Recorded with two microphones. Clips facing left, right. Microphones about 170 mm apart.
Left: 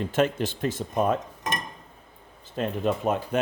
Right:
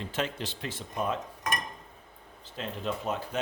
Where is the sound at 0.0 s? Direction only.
50° left (ahead or behind).